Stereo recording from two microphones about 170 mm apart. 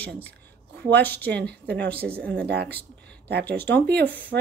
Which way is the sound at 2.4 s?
75° right (ahead or behind).